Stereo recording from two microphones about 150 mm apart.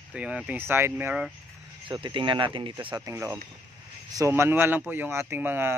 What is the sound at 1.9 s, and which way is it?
Speech, 35° right (ahead or behind).